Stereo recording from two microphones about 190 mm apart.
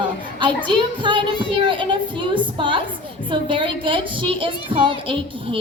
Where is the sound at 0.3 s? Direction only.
25° right (ahead or behind).